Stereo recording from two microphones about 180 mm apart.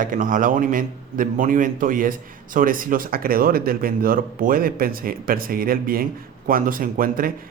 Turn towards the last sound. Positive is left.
turn(degrees=-50)  # may be behind; listen again after turning